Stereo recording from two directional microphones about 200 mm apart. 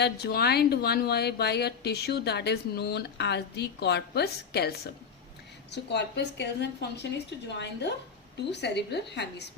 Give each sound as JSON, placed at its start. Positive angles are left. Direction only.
{"t": 0.0, "sound": "speech", "side_deg": 50}
{"t": 5.7, "sound": "a woman's voice", "side_deg": 60}